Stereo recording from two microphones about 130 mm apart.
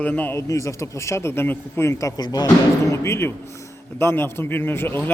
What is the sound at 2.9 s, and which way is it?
Speech, 20° left (ahead or behind).